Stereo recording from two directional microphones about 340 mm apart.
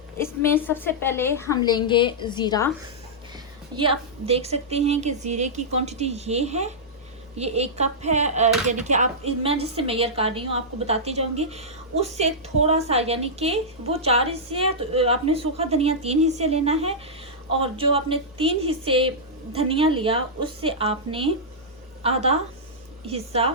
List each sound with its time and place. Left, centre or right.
0.2 s a woman's voice: centre
3.8 s a woman's voice: centre